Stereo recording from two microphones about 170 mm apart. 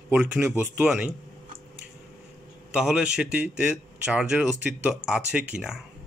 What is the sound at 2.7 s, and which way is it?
Speech, 5° right (ahead or behind).